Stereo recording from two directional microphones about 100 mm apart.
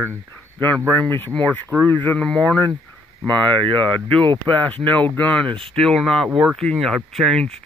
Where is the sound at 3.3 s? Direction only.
55° right (ahead or behind).